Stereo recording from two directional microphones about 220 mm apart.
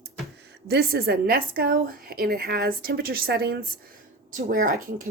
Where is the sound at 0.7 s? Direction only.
45° right (ahead or behind).